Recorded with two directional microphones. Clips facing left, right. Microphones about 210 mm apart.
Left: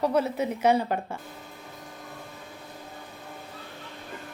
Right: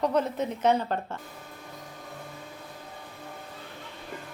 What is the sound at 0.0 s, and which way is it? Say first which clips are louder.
A woman's voice: left 1 dB; 10° left (ahead or behind).